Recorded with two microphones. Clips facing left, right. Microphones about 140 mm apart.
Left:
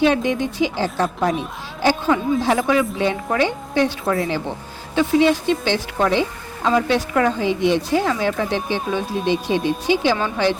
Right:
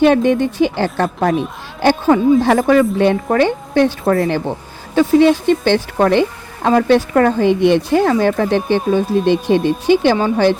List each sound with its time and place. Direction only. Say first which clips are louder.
0.0 s a woman's voice: right 6 dB; 55° right (ahead or behind)
10.2 s a woman's voice: right 7 dB; 35° right (ahead or behind)